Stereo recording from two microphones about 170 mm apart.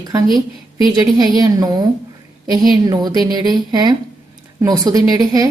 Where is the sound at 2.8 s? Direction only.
20° right (ahead or behind).